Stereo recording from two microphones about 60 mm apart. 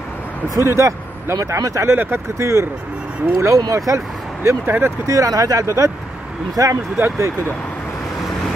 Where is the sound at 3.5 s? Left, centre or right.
Right.